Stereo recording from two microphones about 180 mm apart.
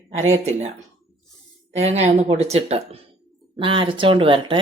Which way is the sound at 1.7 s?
35° right (ahead or behind).